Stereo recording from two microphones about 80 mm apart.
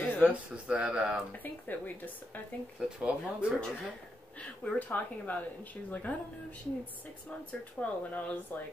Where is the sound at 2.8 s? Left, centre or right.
Centre.